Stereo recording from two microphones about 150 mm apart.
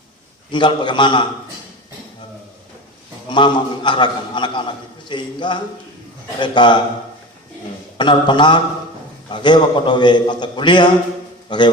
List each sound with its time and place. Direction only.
0.5 s a man's voice: 30° left (ahead or behind)
3.2 s a man's voice: 30° left (ahead or behind)
7.9 s a man's voice: 30° left (ahead or behind)